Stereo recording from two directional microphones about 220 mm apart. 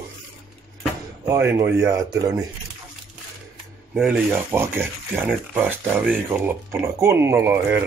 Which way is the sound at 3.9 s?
5° right (ahead or behind).